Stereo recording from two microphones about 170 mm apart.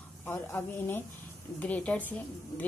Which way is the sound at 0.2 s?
15° left (ahead or behind).